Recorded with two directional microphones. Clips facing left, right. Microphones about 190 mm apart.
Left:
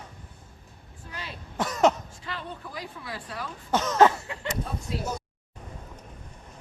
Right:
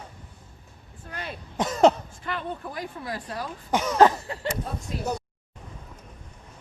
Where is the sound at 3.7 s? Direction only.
10° right (ahead or behind).